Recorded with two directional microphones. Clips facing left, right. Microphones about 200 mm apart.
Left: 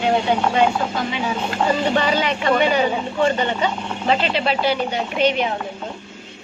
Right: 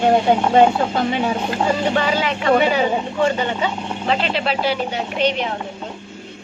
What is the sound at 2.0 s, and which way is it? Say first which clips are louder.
Speech: even; 5° right (ahead or behind).